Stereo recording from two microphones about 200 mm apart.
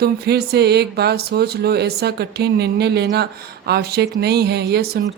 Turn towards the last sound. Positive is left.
turn(degrees=-50)  # may be behind; listen again after turning